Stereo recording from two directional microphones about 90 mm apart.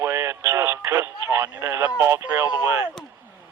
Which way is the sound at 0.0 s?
30° right (ahead or behind).